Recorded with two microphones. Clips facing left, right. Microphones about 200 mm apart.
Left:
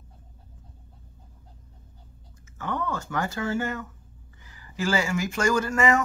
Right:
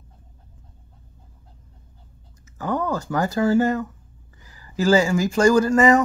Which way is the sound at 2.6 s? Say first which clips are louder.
Right 6 dB; 35° right (ahead or behind).